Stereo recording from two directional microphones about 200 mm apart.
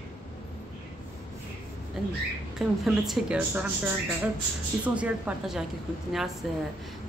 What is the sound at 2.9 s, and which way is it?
Speech, centre (ahead or behind).